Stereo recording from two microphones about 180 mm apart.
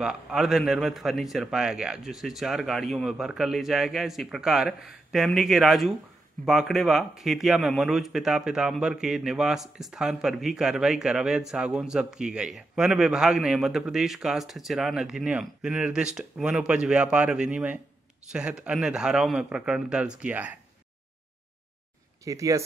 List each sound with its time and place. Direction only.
0.0 s a man's voice: 5° right (ahead or behind)
22.2 s speech: 20° right (ahead or behind)